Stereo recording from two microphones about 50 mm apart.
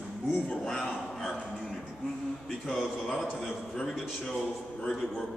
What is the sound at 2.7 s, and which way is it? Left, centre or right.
A man's voice, centre.